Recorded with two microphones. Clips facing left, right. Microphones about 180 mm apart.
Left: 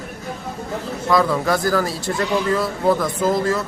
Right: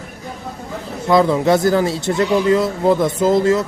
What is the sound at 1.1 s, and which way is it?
Speech, 25° right (ahead or behind).